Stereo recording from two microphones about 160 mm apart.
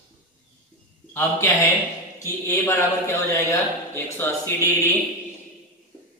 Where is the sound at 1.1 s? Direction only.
15° left (ahead or behind).